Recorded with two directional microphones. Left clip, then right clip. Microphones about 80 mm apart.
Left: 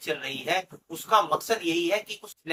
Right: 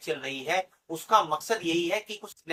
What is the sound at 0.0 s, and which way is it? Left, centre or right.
Speech, left.